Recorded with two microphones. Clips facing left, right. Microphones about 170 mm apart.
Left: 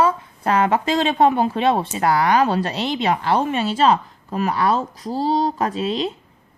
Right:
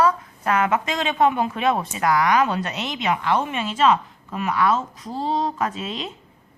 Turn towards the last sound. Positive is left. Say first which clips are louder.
# left 5 dB
turn(degrees=35)  # may be behind; listen again after turning